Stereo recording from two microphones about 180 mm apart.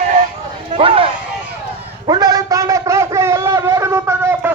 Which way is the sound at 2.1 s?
20° right (ahead or behind).